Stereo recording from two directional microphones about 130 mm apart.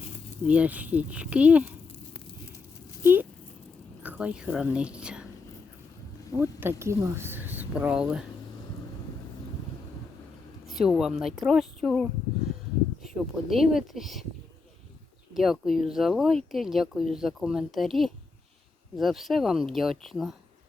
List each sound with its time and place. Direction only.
0.4 s speech: 10° right (ahead or behind)
3.0 s speech: 15° right (ahead or behind)
6.3 s speech: 20° right (ahead or behind)
10.7 s speech: centre (ahead or behind)
13.5 s speech: centre (ahead or behind)
15.4 s speech: centre (ahead or behind)